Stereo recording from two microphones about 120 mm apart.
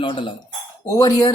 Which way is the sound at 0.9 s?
30° left (ahead or behind).